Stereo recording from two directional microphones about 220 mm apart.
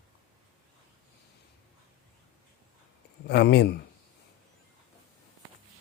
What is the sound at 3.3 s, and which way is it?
Speech, 50° left (ahead or behind).